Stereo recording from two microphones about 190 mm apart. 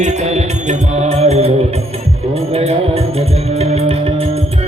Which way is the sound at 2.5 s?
35° right (ahead or behind).